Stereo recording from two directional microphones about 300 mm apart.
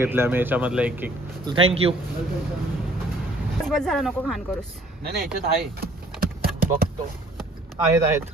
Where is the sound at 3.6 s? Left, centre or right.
Centre.